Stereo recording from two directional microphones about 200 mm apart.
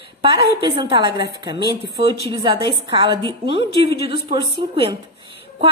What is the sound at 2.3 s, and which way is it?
A woman's voice, 25° right (ahead or behind).